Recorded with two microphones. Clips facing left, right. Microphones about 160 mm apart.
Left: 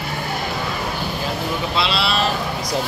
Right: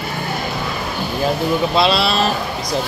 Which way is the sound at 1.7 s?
40° right (ahead or behind).